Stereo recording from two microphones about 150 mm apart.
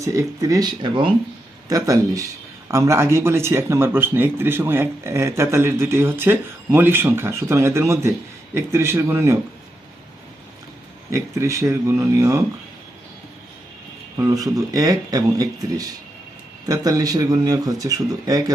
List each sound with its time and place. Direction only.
0.0 s speech: 20° right (ahead or behind)
11.1 s speech: 20° right (ahead or behind)
14.2 s speech: 25° right (ahead or behind)